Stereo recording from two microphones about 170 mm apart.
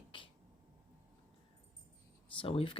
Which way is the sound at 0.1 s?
30° left (ahead or behind).